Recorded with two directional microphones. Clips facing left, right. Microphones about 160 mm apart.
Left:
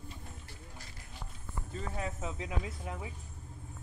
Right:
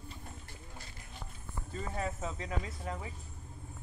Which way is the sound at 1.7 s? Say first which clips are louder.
Right 1 dB; centre (ahead or behind).